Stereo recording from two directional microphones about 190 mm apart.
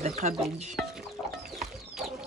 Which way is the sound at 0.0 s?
40° right (ahead or behind).